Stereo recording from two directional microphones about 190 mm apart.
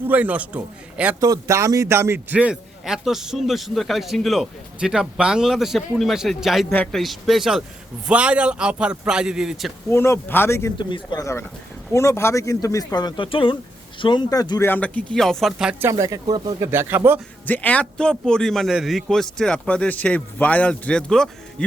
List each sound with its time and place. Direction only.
0.1 s a man's voice: 10° right (ahead or behind)
9.9 s speech: 15° left (ahead or behind)
10.8 s speech: 25° left (ahead or behind)
14.7 s a man's voice: 5° left (ahead or behind)
15.9 s a man's voice: 15° right (ahead or behind)
17.4 s a man's voice: 10° left (ahead or behind)